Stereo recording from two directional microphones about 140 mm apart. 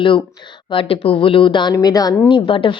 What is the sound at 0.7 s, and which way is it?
A woman's voice, 40° left (ahead or behind).